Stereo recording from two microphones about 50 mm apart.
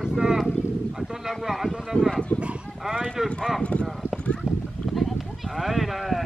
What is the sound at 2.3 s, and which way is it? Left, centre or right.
Livestock, left.